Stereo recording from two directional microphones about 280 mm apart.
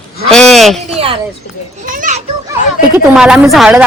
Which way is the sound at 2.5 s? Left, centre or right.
Centre.